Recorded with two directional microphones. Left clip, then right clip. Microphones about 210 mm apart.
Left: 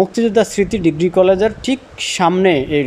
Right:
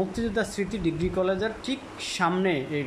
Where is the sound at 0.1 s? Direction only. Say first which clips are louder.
Left 14 dB; 35° left (ahead or behind).